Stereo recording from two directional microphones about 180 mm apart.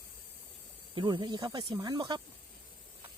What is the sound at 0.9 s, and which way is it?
Speech, 25° right (ahead or behind).